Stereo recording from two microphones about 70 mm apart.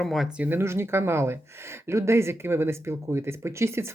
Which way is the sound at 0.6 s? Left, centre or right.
Right.